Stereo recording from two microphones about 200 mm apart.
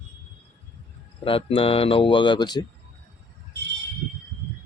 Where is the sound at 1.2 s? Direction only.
25° left (ahead or behind).